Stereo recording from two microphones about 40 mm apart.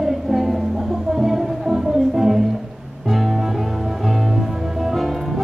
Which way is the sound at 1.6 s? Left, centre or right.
Centre.